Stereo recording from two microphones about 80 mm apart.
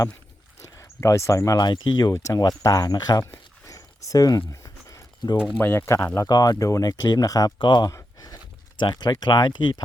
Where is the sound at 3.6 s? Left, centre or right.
Left.